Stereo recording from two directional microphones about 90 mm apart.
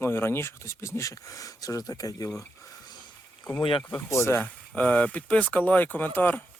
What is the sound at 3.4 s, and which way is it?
Speech, 55° left (ahead or behind).